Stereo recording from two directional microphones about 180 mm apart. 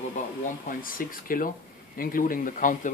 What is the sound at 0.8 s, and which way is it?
Speech, 50° left (ahead or behind).